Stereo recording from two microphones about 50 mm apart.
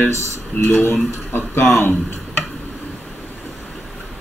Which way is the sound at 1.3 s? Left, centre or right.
Left.